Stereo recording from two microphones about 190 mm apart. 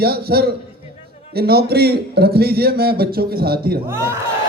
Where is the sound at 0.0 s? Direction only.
55° right (ahead or behind).